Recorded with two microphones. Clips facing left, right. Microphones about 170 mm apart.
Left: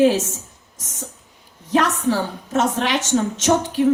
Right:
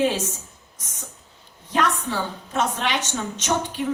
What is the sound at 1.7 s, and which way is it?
A woman's voice, 40° left (ahead or behind).